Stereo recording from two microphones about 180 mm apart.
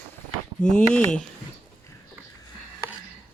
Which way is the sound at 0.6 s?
5° left (ahead or behind).